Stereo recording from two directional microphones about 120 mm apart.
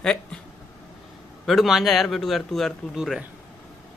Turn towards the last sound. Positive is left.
turn(degrees=-5)  # may be behind; listen again after turning